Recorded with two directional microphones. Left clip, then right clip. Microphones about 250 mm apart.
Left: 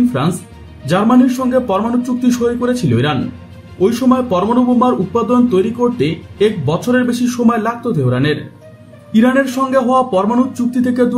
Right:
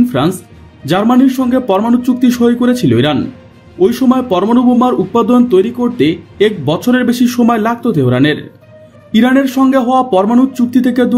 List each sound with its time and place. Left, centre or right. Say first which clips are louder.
0.8 s speech: right 2 dB; right